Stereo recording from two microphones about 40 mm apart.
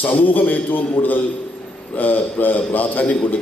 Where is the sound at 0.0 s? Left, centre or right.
Left.